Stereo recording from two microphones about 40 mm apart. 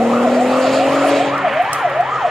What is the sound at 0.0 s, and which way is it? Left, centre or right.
Vehicle, centre.